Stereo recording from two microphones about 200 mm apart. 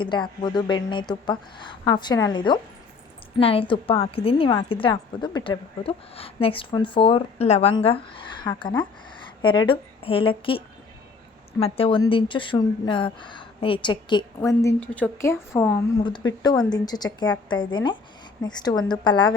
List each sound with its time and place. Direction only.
0.0 s a woman's voice: 20° left (ahead or behind)
11.6 s a woman's voice: 25° left (ahead or behind)